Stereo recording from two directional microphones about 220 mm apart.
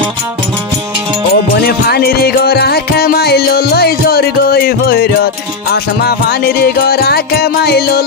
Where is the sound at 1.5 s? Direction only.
45° left (ahead or behind).